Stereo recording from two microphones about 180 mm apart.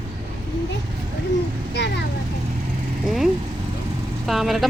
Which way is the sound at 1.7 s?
70° left (ahead or behind).